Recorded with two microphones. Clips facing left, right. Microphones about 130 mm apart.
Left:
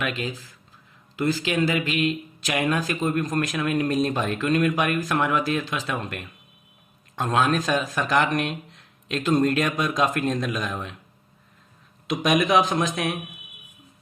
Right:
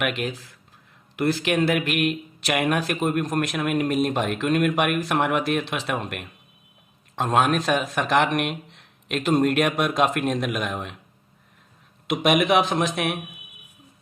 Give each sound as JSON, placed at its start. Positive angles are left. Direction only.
{"t": 0.0, "sound": "a man's voice", "side_deg": -75}
{"t": 12.0, "sound": "a man's voice", "side_deg": -55}